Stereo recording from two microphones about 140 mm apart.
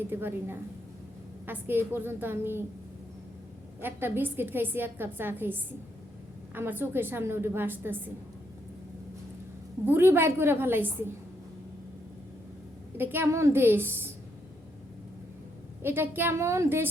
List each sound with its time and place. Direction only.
0.1 s a woman's voice: 15° right (ahead or behind)
3.8 s a woman's voice: 15° right (ahead or behind)
9.8 s a woman's voice: 15° right (ahead or behind)
13.0 s a woman's voice: 15° right (ahead or behind)
15.8 s a woman's voice: 15° right (ahead or behind)